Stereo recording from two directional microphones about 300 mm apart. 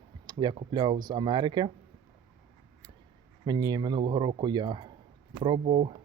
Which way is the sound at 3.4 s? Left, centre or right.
Centre.